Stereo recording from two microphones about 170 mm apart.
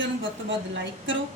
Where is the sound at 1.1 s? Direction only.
90° right.